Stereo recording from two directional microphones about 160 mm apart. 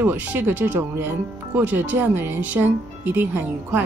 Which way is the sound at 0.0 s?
15° right (ahead or behind).